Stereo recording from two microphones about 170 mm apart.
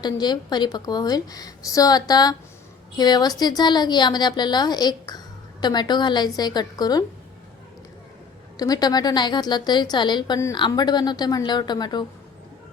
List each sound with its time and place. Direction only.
0.0 s a woman's voice: 25° left (ahead or behind)
8.5 s a woman's voice: 20° left (ahead or behind)